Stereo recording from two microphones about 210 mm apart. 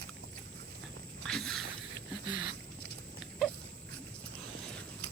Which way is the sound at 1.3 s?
Centre (ahead or behind).